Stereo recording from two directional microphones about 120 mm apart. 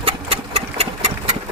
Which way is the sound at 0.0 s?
60° right (ahead or behind).